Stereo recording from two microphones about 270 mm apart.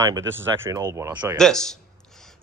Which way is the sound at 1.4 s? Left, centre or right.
Centre.